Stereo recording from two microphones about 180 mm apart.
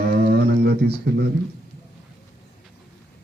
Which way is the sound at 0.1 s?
60° right (ahead or behind).